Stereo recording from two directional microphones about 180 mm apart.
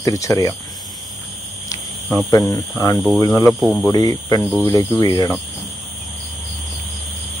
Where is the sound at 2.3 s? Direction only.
15° left (ahead or behind).